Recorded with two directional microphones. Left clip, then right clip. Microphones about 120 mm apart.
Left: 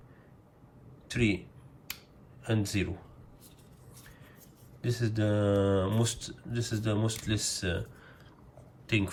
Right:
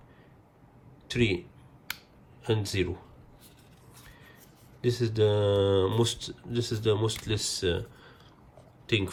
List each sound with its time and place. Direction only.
1.0 s speech: 50° right (ahead or behind)
2.4 s speech: 45° right (ahead or behind)
4.8 s speech: 45° right (ahead or behind)